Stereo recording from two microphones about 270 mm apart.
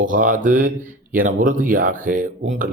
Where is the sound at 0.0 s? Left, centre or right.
Right.